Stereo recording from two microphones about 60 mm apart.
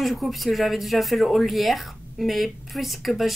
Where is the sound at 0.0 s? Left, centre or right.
Centre.